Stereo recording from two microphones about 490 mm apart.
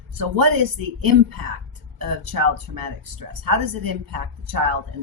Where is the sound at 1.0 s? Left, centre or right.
Right.